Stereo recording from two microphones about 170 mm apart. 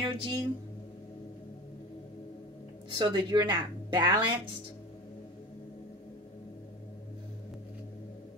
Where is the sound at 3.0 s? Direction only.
25° right (ahead or behind).